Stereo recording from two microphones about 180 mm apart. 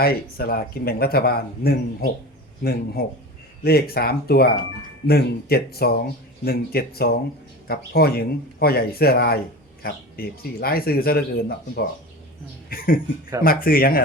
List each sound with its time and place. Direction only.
0.0 s speech: 55° left (ahead or behind)